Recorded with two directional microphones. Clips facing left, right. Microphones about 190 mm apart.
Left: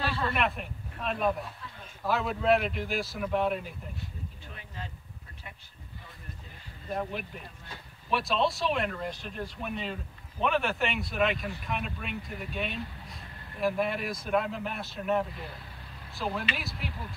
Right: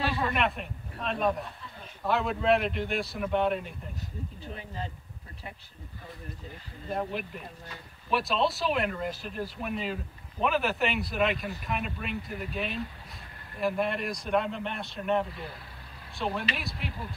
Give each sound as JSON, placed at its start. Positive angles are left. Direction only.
{"t": 0.3, "sound": "speech", "side_deg": 0}
{"t": 4.5, "sound": "speech", "side_deg": -35}
{"t": 6.9, "sound": "speech", "side_deg": 0}